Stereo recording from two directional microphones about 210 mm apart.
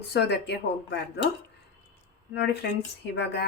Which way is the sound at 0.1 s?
55° left (ahead or behind).